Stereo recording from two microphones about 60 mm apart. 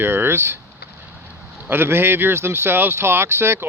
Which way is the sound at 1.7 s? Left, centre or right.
Right.